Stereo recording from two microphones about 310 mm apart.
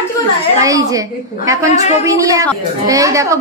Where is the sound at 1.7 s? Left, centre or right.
Left.